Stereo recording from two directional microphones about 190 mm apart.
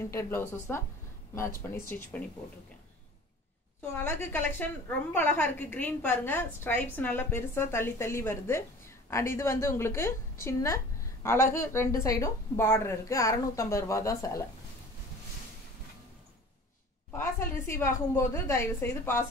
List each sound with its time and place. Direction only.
0.0 s a woman's voice: 15° left (ahead or behind)
3.9 s a woman's voice: 10° left (ahead or behind)
17.2 s a woman's voice: 15° left (ahead or behind)